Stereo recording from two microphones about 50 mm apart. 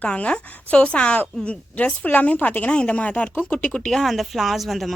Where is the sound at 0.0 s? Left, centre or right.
Left.